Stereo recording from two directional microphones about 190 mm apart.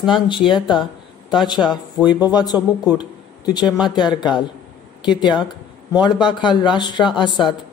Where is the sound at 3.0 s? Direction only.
20° left (ahead or behind).